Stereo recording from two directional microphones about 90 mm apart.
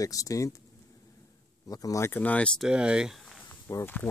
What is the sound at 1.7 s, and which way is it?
Speech, 40° left (ahead or behind).